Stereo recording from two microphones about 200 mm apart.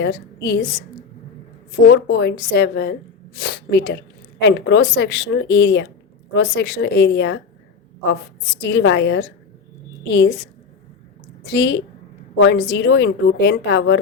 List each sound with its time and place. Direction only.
0.0 s a woman's voice: 60° left (ahead or behind)
1.9 s a woman's voice: 60° left (ahead or behind)
11.5 s a woman's voice: 60° left (ahead or behind)